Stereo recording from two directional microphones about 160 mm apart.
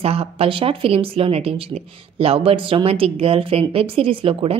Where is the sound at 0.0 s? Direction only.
40° right (ahead or behind).